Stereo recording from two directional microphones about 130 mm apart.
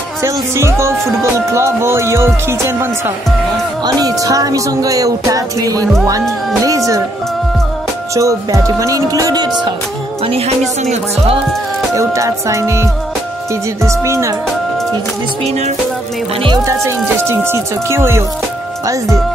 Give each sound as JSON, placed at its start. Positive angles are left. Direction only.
{"t": 0.2, "sound": "speech", "side_deg": -20}
{"t": 3.8, "sound": "speech", "side_deg": -30}
{"t": 8.1, "sound": "speech", "side_deg": -25}
{"t": 10.2, "sound": "music", "side_deg": -50}
{"t": 11.9, "sound": "speech", "side_deg": -25}
{"t": 13.8, "sound": "speech", "side_deg": -20}
{"t": 16.6, "sound": "speech", "side_deg": -20}